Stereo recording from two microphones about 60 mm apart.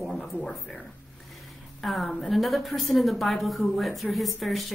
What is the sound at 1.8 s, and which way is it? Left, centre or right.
A woman's voice, centre.